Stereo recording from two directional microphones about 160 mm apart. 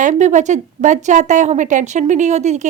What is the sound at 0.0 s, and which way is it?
A woman's voice, 50° right (ahead or behind).